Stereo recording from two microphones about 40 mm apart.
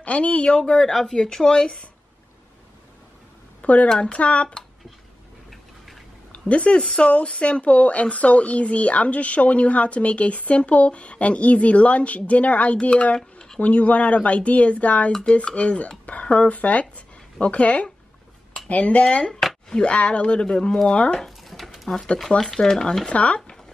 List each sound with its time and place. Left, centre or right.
0.0 s speech: left
0.6 s speech: centre
3.6 s speech: left
5.5 s mechanisms: centre
6.5 s speech: left
20.4 s speech: centre
20.9 s speech: left
21.2 s pigeon: centre
22.6 s speech: centre
23.1 s speech: left